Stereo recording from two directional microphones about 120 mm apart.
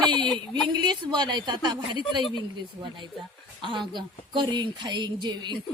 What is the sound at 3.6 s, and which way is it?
Speech, 40° right (ahead or behind).